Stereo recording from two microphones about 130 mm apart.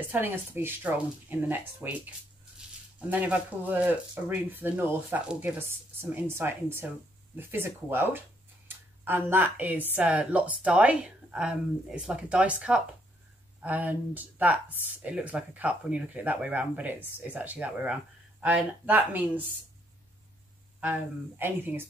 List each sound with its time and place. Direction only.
0.0 s speech: 15° right (ahead or behind)
21.4 s speech: 15° right (ahead or behind)